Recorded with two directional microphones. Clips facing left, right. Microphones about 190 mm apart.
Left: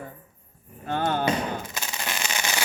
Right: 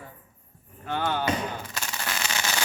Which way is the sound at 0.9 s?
45° left (ahead or behind).